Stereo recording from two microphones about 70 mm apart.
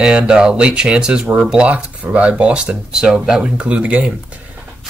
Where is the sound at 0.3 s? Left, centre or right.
Centre.